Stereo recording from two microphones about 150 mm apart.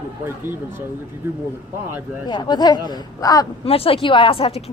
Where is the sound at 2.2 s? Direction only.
30° left (ahead or behind).